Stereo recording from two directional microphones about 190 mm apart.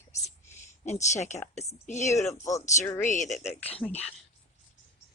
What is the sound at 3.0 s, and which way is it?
Speech, 40° left (ahead or behind).